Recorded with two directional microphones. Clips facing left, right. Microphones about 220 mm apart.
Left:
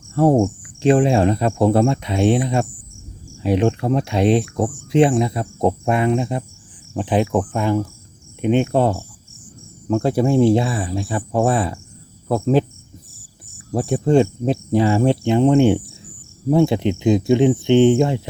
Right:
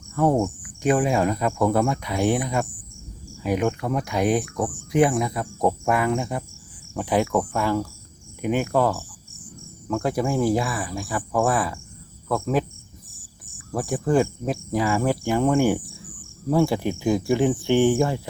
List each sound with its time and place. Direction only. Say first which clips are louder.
0.1 s speech: left 5 dB; 30° left (ahead or behind)
13.7 s speech: left 5 dB; 25° left (ahead or behind)